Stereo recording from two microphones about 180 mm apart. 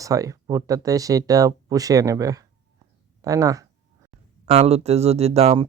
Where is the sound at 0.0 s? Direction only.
20° right (ahead or behind).